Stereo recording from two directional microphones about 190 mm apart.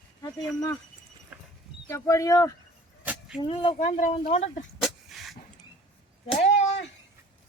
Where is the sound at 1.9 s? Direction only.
15° left (ahead or behind).